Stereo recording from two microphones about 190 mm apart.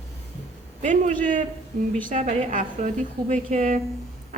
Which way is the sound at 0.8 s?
40° right (ahead or behind).